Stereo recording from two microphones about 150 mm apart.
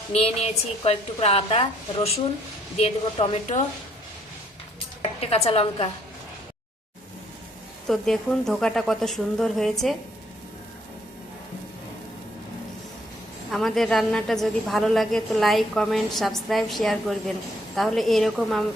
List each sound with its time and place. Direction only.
0.1 s a woman's voice: 45° left (ahead or behind)
5.2 s a woman's voice: 40° left (ahead or behind)
7.9 s a woman's voice: centre (ahead or behind)
13.5 s a woman's voice: centre (ahead or behind)